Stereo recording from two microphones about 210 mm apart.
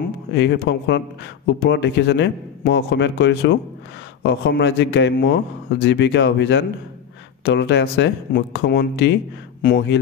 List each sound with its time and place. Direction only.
0.3 s a man's voice: 55° left (ahead or behind)